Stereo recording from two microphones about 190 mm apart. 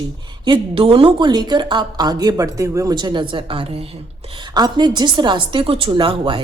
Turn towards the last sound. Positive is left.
turn(degrees=-25)  # may be behind; listen again after turning